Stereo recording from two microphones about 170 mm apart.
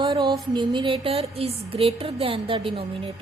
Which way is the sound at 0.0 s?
25° right (ahead or behind).